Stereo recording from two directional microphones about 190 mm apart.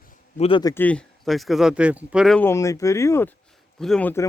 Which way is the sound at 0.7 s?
5° left (ahead or behind).